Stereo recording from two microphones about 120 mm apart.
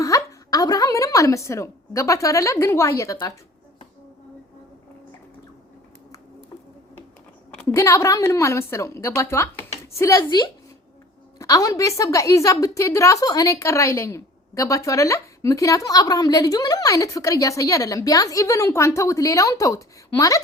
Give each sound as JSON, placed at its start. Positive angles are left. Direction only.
{"t": 0.0, "sound": "a woman's voice", "side_deg": 25}
{"t": 7.7, "sound": "a woman's voice", "side_deg": 25}
{"t": 10.2, "sound": "a woman's voice", "side_deg": 35}